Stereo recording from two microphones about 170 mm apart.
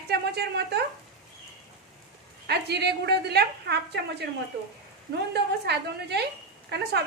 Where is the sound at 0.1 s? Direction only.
70° right (ahead or behind).